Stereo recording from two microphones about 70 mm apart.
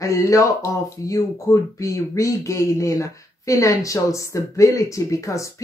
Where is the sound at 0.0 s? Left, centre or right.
Left.